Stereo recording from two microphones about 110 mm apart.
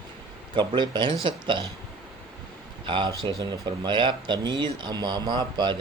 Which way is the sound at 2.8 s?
45° right (ahead or behind).